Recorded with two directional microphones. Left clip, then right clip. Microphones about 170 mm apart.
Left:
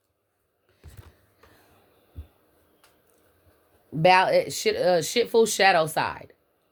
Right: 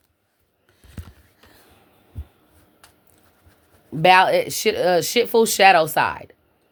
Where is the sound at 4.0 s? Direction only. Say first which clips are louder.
Right 4 dB; 45° right (ahead or behind).